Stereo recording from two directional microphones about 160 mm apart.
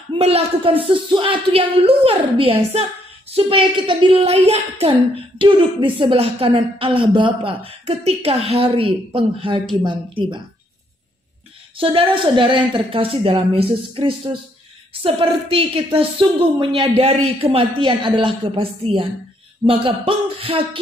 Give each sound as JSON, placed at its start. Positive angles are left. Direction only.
{"t": 0.2, "sound": "speech", "side_deg": -40}
{"t": 5.4, "sound": "speech", "side_deg": -30}
{"t": 11.8, "sound": "speech", "side_deg": -35}